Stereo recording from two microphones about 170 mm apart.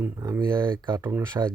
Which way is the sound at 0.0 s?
15° right (ahead or behind).